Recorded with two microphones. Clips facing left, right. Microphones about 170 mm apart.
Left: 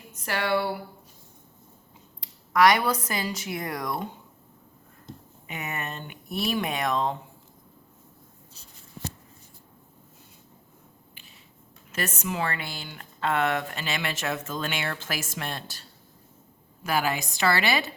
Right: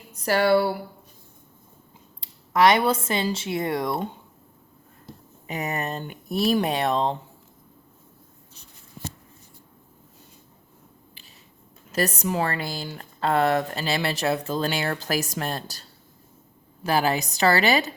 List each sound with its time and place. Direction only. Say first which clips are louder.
0.1 s speech: right 7 dB; 35° right (ahead or behind)
2.2 s speech: right 2 dB; 25° right (ahead or behind)
5.5 s speech: right 6 dB; 35° right (ahead or behind)
11.9 s speech: right 6 dB; 35° right (ahead or behind)